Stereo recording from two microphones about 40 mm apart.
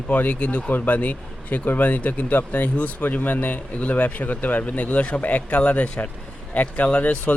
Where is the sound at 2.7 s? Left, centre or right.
Left.